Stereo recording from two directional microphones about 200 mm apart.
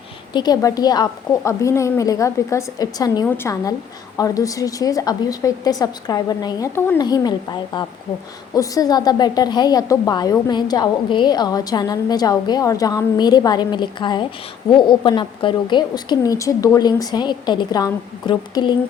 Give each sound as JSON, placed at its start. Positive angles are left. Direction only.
{"t": 0.3, "sound": "a woman's voice", "side_deg": 20}